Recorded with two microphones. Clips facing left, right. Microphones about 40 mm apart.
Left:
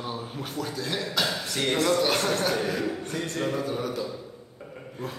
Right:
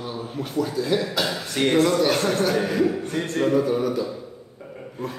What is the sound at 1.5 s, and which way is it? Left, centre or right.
Speech, right.